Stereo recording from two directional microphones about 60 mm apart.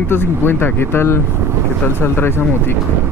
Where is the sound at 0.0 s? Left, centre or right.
Left.